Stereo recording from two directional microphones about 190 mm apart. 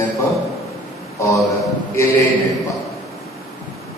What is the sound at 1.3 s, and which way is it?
Speech, centre (ahead or behind).